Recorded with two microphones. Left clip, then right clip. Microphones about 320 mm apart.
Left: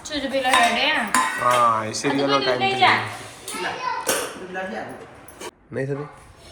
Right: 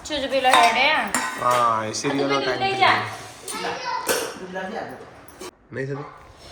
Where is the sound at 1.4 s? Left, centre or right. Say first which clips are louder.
Right 1 dB; centre.